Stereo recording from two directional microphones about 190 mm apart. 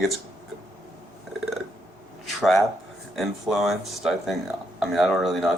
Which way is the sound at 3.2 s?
Centre (ahead or behind).